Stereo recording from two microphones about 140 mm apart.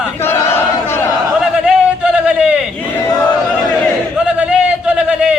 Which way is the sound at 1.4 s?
5° right (ahead or behind).